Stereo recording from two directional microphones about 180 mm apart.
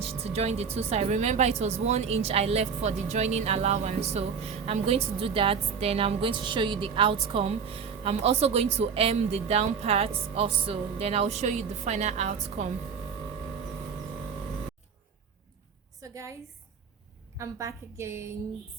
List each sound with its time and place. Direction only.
0.0 s speech: 35° right (ahead or behind)
16.0 s a sound: 15° right (ahead or behind)
17.3 s a woman's voice: 15° right (ahead or behind)